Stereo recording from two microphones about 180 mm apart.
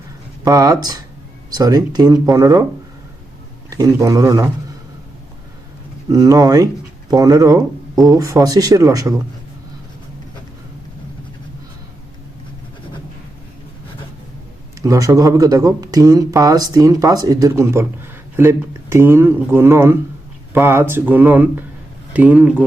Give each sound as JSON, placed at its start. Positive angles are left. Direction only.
{"t": 0.4, "sound": "speech", "side_deg": -20}
{"t": 3.7, "sound": "speech", "side_deg": -20}
{"t": 6.1, "sound": "speech", "side_deg": -20}
{"t": 14.8, "sound": "speech", "side_deg": -15}